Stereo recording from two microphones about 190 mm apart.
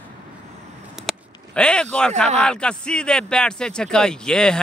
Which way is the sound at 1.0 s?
5° left (ahead or behind).